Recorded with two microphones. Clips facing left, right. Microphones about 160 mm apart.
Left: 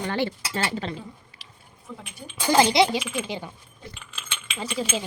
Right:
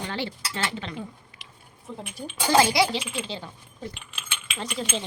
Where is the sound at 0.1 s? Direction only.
50° left (ahead or behind).